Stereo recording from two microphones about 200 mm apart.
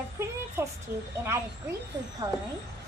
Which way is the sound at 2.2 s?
15° right (ahead or behind).